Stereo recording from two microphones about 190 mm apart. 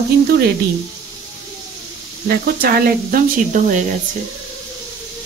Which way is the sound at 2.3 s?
50° right (ahead or behind).